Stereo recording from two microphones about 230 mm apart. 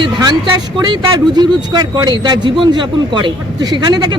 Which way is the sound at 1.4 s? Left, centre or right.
Centre.